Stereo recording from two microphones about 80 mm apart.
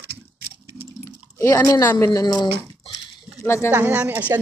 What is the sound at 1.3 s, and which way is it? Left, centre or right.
A woman's voice, left.